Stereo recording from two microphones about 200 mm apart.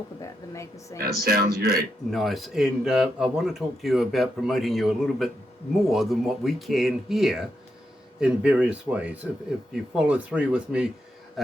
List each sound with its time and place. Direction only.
0.2 s a woman's voice: 15° left (ahead or behind)
0.9 s speech: 50° right (ahead or behind)
2.0 s a man's voice: centre (ahead or behind)